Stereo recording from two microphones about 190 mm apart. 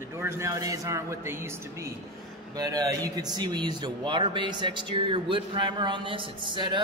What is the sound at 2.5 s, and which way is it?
A man's voice, 20° right (ahead or behind).